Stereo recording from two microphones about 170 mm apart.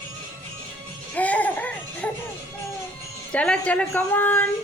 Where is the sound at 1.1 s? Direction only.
10° left (ahead or behind).